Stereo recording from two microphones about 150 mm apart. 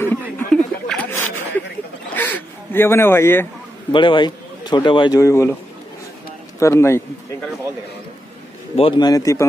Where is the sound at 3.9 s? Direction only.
35° left (ahead or behind).